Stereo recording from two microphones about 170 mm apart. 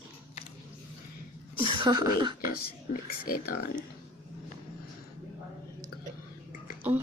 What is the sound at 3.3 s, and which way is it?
Speech, 60° left (ahead or behind).